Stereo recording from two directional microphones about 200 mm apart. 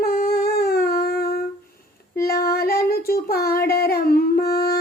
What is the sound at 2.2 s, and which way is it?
Female singing, 50° left (ahead or behind).